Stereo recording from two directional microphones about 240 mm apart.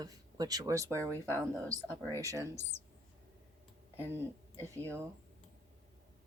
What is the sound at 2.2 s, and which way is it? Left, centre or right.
Speech, centre.